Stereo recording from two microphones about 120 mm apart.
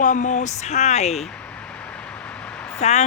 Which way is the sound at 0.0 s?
90° left.